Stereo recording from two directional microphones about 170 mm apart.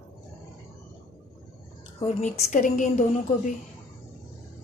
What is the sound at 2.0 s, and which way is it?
A woman's voice, 40° left (ahead or behind).